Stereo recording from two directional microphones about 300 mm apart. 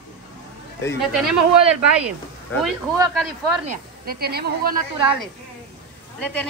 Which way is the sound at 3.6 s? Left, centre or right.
Right.